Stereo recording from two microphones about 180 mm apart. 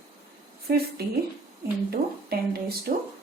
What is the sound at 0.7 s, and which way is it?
Speech, 60° right (ahead or behind).